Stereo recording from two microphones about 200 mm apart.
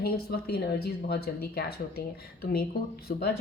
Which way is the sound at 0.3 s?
50° left (ahead or behind).